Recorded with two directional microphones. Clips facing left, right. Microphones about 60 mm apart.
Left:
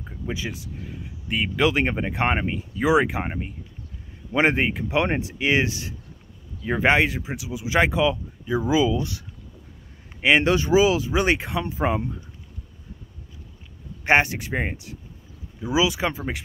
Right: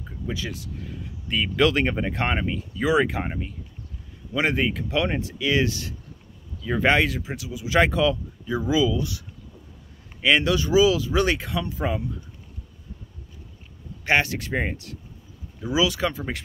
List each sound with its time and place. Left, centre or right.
0.3 s speech: centre
8.9 s speech: left
10.4 s speech: left
14.0 s speech: left